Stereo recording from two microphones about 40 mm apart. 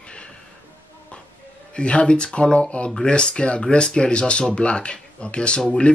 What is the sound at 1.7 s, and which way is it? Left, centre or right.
Speech, left.